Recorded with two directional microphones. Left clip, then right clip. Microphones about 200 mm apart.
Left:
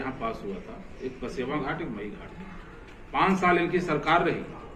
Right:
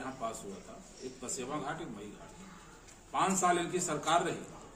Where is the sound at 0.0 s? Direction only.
30° right (ahead or behind).